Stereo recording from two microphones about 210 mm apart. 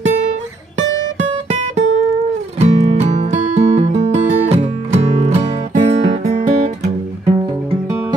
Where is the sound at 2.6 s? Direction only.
30° right (ahead or behind).